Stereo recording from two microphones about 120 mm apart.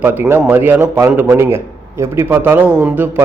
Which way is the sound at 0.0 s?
20° right (ahead or behind).